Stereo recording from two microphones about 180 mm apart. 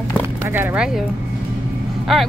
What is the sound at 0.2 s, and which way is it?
Speech, 10° right (ahead or behind).